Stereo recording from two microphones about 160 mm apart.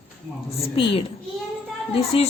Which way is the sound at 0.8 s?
35° left (ahead or behind).